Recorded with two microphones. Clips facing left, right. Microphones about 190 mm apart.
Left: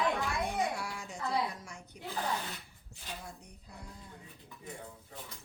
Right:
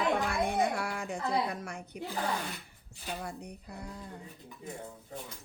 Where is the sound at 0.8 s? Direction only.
60° right (ahead or behind).